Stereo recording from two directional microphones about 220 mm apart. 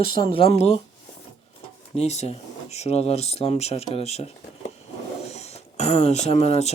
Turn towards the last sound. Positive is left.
turn(degrees=30)  # may be behind; listen again after turning